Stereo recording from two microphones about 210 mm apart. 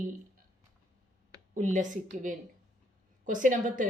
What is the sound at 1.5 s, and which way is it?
Speech, 35° right (ahead or behind).